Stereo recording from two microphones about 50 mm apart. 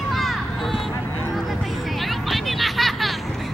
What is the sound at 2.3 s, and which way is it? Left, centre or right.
Music, centre.